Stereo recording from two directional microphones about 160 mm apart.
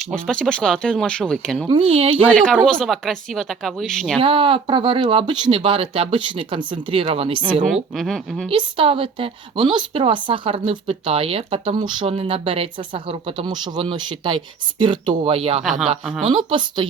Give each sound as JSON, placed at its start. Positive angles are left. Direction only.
{"t": 0.0, "sound": "speech", "side_deg": 5}
{"t": 1.6, "sound": "speech", "side_deg": -35}
{"t": 2.3, "sound": "speech", "side_deg": 5}
{"t": 4.2, "sound": "speech", "side_deg": -35}
{"t": 7.7, "sound": "speech", "side_deg": 0}
{"t": 8.4, "sound": "speech", "side_deg": -35}